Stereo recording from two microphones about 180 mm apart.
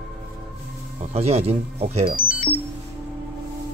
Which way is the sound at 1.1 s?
35° right (ahead or behind).